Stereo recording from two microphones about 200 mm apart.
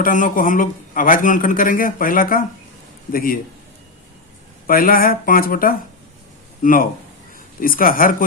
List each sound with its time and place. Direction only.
0.0 s speech: 40° left (ahead or behind)
4.6 s speech: 45° left (ahead or behind)